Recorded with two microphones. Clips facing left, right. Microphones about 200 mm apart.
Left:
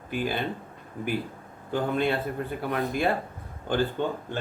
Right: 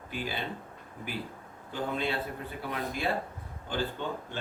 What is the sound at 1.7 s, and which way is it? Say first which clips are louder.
Speech: left 6 dB; 55° left (ahead or behind).